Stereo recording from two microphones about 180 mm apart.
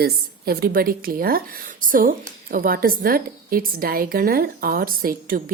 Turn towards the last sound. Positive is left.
turn(degrees=-55)  # may be behind; listen again after turning